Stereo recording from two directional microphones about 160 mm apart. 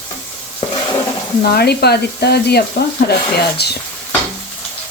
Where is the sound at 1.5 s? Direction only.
90° left.